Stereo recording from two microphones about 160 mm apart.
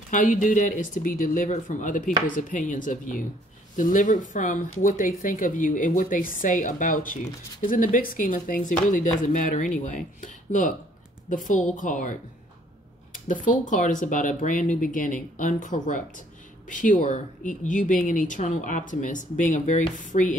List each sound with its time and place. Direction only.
0.1 s speech: 50° left (ahead or behind)
13.3 s speech: 55° left (ahead or behind)